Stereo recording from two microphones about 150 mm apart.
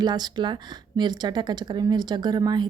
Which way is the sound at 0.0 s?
30° right (ahead or behind).